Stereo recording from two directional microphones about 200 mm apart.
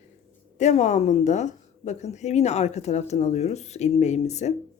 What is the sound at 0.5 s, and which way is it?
A woman's voice, 35° left (ahead or behind).